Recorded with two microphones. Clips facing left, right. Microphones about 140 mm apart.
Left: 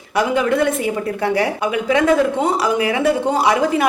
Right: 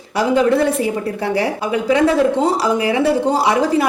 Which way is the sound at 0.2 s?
30° right (ahead or behind).